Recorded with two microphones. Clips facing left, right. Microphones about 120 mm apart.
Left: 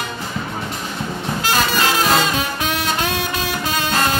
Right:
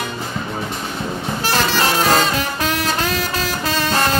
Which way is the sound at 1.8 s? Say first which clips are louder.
Right 2 dB; 40° right (ahead or behind).